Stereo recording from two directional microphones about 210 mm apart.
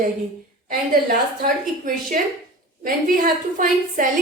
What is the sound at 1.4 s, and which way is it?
A woman's voice, 40° right (ahead or behind).